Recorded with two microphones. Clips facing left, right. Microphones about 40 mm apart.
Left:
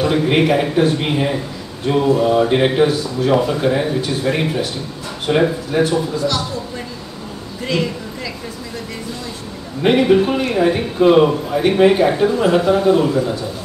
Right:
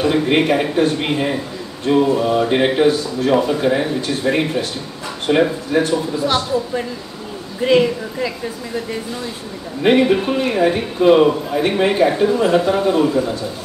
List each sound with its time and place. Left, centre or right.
0.0 s a man's voice: centre
6.1 s speech: right
9.8 s a man's voice: centre